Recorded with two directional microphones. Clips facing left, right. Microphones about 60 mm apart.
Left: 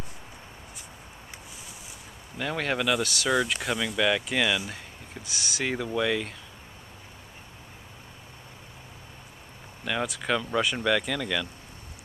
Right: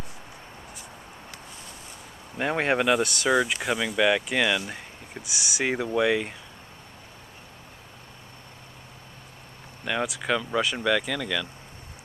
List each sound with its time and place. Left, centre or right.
2.3 s speech: right
3.2 s speech: centre
9.8 s speech: centre